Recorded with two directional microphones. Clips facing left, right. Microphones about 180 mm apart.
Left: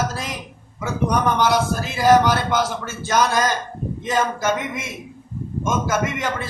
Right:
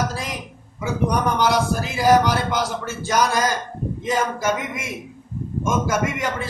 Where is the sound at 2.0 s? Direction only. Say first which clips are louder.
Left 2 dB; 10° right (ahead or behind).